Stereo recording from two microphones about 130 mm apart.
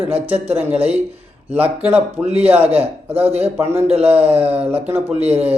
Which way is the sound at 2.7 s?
50° right (ahead or behind).